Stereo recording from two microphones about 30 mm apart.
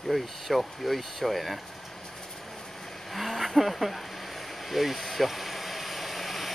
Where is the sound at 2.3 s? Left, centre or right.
Centre.